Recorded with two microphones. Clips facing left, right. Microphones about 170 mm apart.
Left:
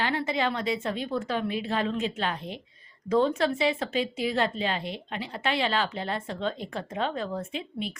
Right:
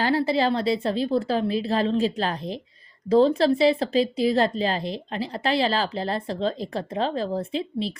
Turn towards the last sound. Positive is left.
turn(degrees=-35)  # may be behind; listen again after turning